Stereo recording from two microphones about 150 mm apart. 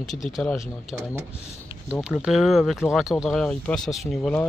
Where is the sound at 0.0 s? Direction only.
Centre (ahead or behind).